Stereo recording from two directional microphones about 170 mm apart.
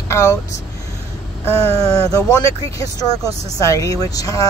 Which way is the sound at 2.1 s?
20° left (ahead or behind).